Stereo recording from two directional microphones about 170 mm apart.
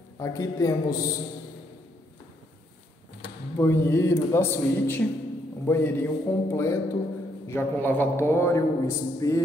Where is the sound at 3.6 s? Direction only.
15° left (ahead or behind).